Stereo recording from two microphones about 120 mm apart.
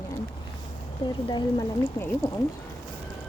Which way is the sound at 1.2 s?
35° left (ahead or behind).